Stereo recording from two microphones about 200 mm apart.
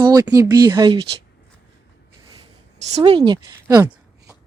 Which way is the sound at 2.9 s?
25° right (ahead or behind).